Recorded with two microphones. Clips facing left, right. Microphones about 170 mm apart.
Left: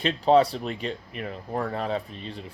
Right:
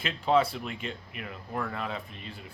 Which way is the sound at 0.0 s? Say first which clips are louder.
Left 6 dB; 35° left (ahead or behind).